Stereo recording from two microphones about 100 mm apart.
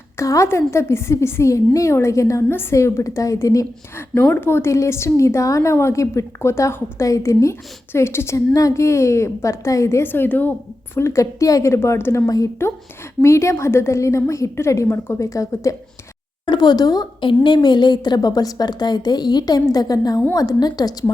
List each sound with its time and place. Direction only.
0.2 s a woman's voice: 30° left (ahead or behind)
4.1 s a woman's voice: 20° left (ahead or behind)
10.9 s a woman's voice: 30° left (ahead or behind)
16.5 s a woman's voice: 45° left (ahead or behind)